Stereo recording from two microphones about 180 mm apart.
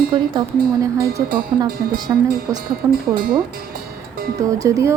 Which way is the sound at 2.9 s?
55° right (ahead or behind).